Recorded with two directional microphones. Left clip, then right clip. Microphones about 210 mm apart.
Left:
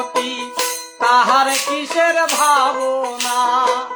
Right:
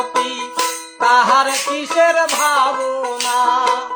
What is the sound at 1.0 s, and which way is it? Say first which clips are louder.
Music: right 1 dB; 5° left (ahead or behind).